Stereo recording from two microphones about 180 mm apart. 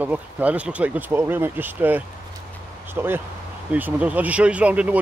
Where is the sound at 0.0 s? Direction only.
10° right (ahead or behind).